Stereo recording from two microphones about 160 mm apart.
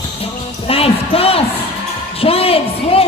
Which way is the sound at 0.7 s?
35° left (ahead or behind).